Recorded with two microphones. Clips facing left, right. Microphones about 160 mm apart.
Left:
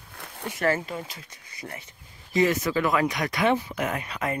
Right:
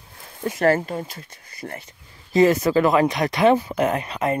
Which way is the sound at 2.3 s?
35° right (ahead or behind).